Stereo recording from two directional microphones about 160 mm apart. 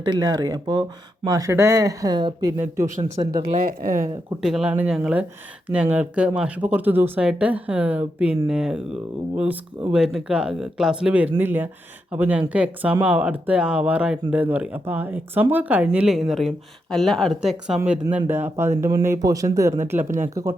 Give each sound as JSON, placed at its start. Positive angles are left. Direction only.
{"t": 0.0, "sound": "speech", "side_deg": -25}
{"t": 3.7, "sound": "speech", "side_deg": -60}
{"t": 4.4, "sound": "speech", "side_deg": -5}
{"t": 18.3, "sound": "speech", "side_deg": -15}
{"t": 20.1, "sound": "speech", "side_deg": -55}